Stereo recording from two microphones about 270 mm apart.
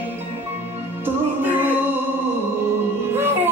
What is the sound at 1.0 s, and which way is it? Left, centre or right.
Music, centre.